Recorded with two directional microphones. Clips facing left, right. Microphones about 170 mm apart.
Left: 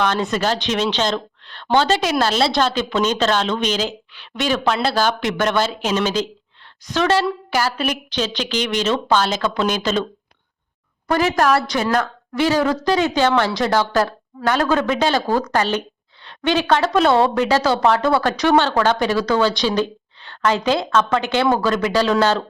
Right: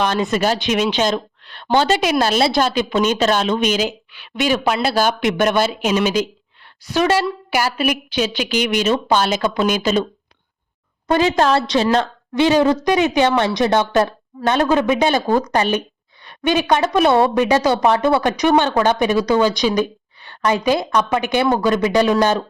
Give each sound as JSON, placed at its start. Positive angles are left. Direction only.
{"t": 0.0, "sound": "a woman's voice", "side_deg": -15}
{"t": 11.1, "sound": "a woman's voice", "side_deg": -20}